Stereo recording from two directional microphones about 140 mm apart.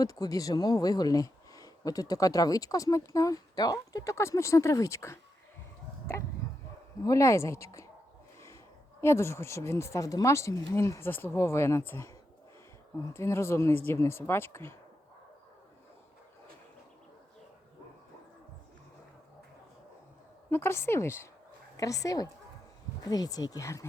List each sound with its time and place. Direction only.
0.0 s speech: 25° left (ahead or behind)
7.0 s speech: 20° left (ahead or behind)
20.5 s speech: 15° left (ahead or behind)